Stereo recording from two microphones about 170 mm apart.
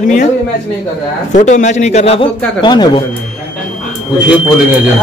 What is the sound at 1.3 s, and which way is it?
Speech, 45° left (ahead or behind).